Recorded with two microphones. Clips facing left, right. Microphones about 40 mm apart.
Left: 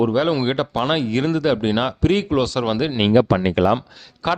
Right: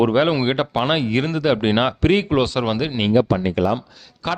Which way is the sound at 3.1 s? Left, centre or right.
Left.